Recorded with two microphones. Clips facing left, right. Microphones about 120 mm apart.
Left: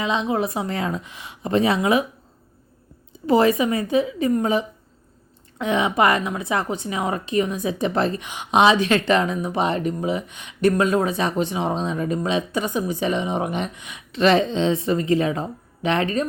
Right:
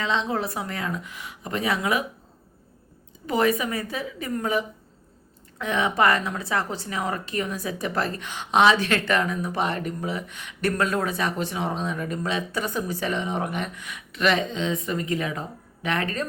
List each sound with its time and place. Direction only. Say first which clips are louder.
0.0 s a woman's voice: left 3 dB; 15° left (ahead or behind)
3.2 s a woman's voice: left 6 dB; 25° left (ahead or behind)